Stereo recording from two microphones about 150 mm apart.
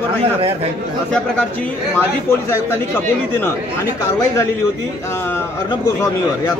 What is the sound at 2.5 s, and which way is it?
Speech, 15° left (ahead or behind).